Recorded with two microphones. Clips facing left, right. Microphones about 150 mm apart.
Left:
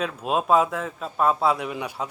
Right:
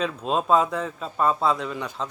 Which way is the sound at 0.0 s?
5° left (ahead or behind).